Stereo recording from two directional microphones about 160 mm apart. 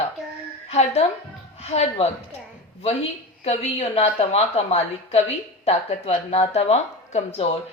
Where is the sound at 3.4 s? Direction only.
40° left (ahead or behind).